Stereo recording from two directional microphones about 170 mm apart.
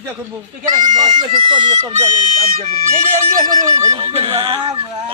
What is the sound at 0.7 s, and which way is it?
Speech, 25° right (ahead or behind).